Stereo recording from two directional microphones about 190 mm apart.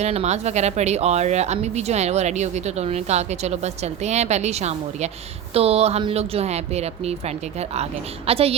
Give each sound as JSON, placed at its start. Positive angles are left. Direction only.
{"t": 0.0, "sound": "speech", "side_deg": -35}
{"t": 8.3, "sound": "speech", "side_deg": -30}